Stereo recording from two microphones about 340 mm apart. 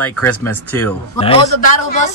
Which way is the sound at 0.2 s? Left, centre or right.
Centre.